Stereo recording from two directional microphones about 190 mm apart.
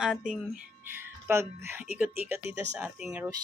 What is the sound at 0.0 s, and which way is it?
Speech, 5° right (ahead or behind).